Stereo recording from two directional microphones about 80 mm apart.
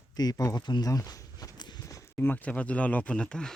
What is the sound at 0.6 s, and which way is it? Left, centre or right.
Speech, left.